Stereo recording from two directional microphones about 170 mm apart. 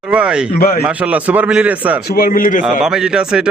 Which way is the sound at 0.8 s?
10° right (ahead or behind).